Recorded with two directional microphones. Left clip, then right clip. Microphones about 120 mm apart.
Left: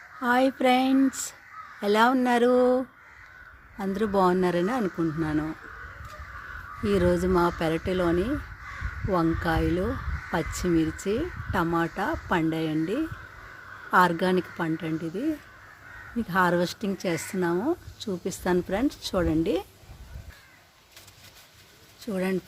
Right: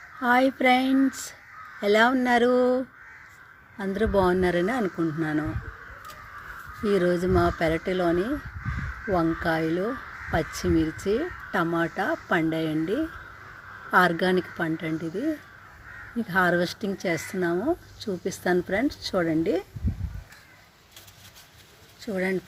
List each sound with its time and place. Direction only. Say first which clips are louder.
0.2 s speech: right 2 dB; centre (ahead or behind)
6.8 s speech: right 1 dB; 10° left (ahead or behind)
22.0 s speech: right 2 dB; 15° left (ahead or behind)